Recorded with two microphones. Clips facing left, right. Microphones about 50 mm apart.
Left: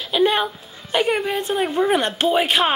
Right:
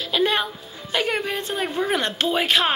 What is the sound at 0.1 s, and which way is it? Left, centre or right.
Music, centre.